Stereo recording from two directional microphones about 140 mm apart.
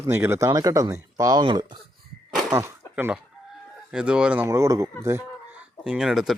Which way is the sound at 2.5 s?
20° right (ahead or behind).